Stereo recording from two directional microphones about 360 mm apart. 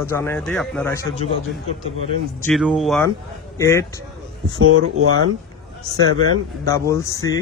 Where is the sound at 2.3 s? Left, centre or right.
Centre.